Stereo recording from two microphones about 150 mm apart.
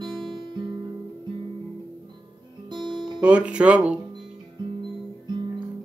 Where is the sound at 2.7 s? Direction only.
30° right (ahead or behind).